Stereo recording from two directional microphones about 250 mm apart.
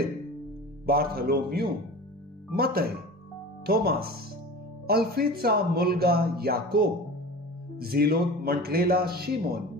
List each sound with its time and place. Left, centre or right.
0.8 s speech: right